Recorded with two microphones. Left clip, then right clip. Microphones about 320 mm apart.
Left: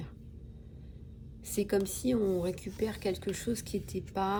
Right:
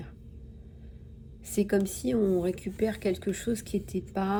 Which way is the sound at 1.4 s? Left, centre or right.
Centre.